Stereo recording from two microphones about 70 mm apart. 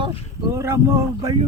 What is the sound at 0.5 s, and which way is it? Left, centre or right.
Speech, right.